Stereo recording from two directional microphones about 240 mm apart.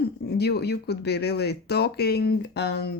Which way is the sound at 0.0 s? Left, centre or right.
Left.